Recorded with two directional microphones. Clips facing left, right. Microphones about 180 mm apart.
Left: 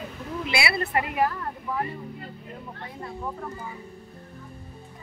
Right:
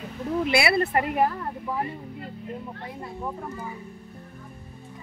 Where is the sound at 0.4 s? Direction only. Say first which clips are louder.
Right 5 dB; 50° right (ahead or behind).